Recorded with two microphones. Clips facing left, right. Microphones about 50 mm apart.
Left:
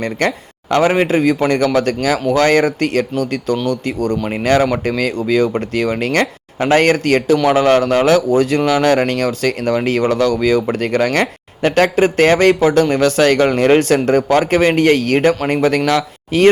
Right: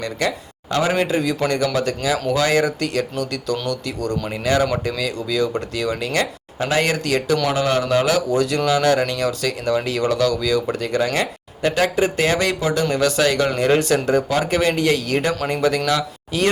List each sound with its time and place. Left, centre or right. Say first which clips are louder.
0.0 s speech: left 5 dB; left
8.5 s speech: left 4 dB; left
8.9 s speech: left 4 dB; left
15.4 s speech: left 5 dB; left
15.9 s speech: left 5 dB; left